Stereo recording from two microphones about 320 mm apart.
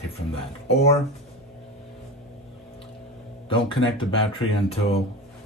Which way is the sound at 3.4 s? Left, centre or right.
Centre.